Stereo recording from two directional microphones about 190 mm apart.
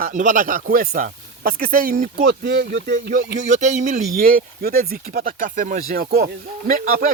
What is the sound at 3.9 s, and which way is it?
Speech, 50° right (ahead or behind).